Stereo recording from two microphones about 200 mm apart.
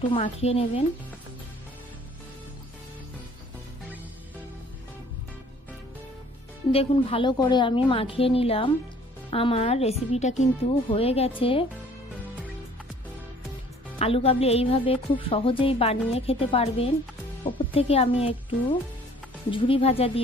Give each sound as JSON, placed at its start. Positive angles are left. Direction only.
{"t": 0.1, "sound": "speech", "side_deg": 30}
{"t": 6.7, "sound": "speech", "side_deg": 30}
{"t": 13.9, "sound": "speech", "side_deg": 30}
{"t": 19.5, "sound": "speech", "side_deg": 30}